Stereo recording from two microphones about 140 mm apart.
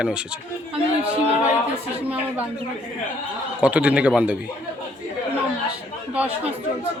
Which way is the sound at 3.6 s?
10° right (ahead or behind).